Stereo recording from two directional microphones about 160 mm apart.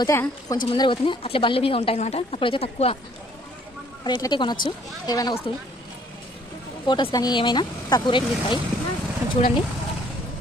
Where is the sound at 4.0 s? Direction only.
25° left (ahead or behind).